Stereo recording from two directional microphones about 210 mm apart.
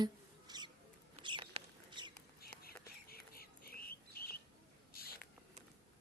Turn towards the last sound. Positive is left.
turn(degrees=45)  # may be behind; listen again after turning